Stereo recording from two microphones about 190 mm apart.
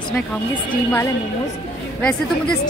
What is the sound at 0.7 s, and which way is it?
Speech, 10° left (ahead or behind).